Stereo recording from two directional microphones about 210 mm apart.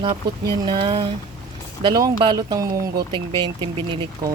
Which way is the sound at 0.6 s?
20° right (ahead or behind).